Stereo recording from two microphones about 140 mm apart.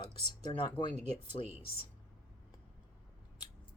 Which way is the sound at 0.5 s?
35° left (ahead or behind).